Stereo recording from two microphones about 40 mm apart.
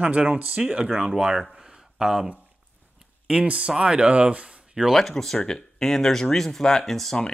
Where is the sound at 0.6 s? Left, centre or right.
Right.